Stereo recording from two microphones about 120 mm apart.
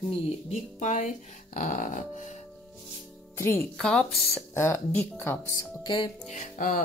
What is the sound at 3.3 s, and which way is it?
Speech, 20° left (ahead or behind).